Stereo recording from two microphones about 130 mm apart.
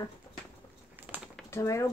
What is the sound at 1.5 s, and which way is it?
Speech, 20° left (ahead or behind).